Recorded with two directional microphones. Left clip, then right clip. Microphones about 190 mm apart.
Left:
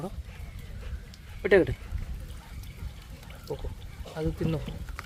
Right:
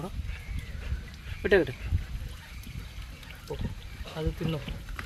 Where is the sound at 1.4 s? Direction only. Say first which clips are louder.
Left 2 dB; 30° left (ahead or behind).